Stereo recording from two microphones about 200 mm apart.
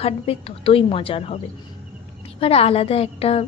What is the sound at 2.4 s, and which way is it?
A woman's voice, 30° left (ahead or behind).